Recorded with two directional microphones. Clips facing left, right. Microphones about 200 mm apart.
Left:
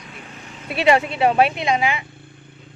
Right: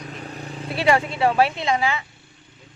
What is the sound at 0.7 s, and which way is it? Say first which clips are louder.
Speech: left 3 dB; 20° left (ahead or behind).